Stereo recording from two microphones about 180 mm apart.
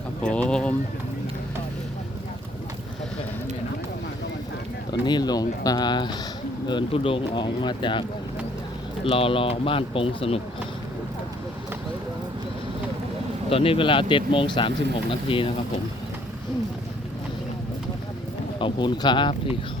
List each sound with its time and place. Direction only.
0.2 s speech: 5° left (ahead or behind)
4.9 s speech: 25° left (ahead or behind)
9.0 s speech: 30° left (ahead or behind)
13.5 s speech: 30° left (ahead or behind)
18.6 s speech: 25° left (ahead or behind)